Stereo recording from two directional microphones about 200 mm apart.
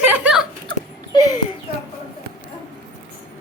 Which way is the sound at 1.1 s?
20° left (ahead or behind).